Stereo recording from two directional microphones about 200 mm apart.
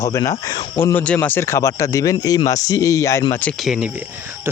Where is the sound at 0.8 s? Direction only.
10° left (ahead or behind).